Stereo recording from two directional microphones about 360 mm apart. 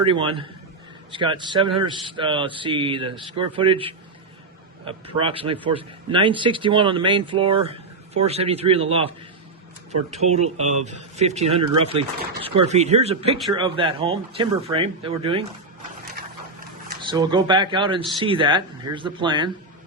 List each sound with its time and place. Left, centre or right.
0.0 s speech: centre
17.0 s speech: centre